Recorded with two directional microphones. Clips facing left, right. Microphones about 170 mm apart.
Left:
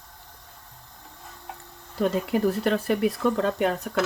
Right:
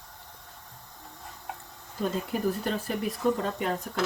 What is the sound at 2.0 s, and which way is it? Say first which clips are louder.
Speech: left 5 dB; 75° left (ahead or behind).